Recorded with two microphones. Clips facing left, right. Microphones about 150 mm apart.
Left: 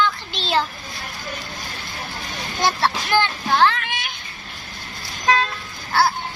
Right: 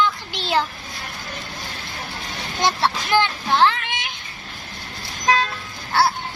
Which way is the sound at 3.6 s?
20° right (ahead or behind).